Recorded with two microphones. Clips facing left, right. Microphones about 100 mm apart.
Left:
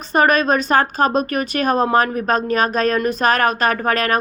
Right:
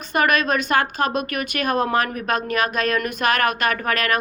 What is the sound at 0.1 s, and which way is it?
A woman's voice, 35° left (ahead or behind).